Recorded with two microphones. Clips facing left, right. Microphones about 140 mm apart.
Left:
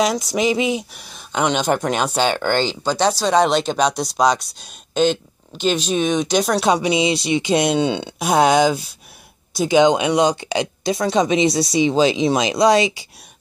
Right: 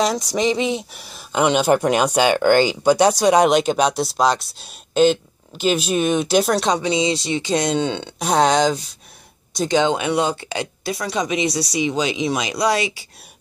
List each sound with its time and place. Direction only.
0.0 s speech: centre (ahead or behind)
6.7 s speech: 15° left (ahead or behind)